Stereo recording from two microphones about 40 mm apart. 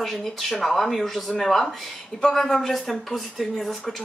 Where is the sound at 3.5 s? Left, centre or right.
Centre.